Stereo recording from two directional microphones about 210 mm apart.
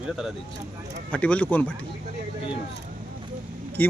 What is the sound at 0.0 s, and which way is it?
Speech, centre (ahead or behind).